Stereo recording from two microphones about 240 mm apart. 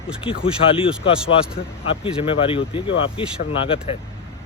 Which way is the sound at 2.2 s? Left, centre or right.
Left.